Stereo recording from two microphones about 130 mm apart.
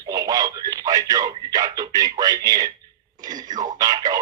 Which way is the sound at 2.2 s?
30° right (ahead or behind).